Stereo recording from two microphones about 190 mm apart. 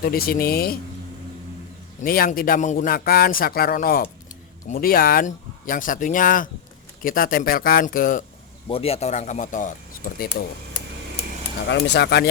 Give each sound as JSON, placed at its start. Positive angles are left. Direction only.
{"t": 0.0, "sound": "speech", "side_deg": 50}
{"t": 2.0, "sound": "speech", "side_deg": 50}
{"t": 8.6, "sound": "speech", "side_deg": 30}
{"t": 11.7, "sound": "speech", "side_deg": 65}